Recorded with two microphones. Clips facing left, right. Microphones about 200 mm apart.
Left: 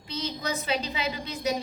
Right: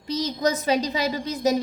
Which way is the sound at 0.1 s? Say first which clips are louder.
Right 8 dB; 40° right (ahead or behind).